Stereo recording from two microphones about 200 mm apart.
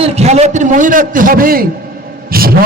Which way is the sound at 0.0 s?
35° right (ahead or behind).